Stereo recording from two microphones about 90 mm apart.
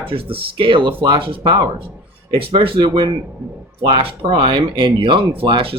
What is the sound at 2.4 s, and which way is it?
Speech, 85° right.